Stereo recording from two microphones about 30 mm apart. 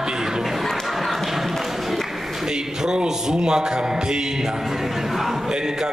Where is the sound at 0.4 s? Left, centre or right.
Centre.